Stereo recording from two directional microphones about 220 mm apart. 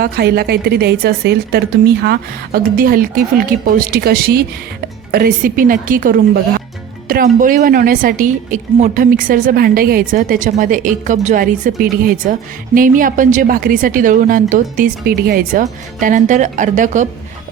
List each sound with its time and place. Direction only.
0.0 s a woman's voice: 45° right (ahead or behind)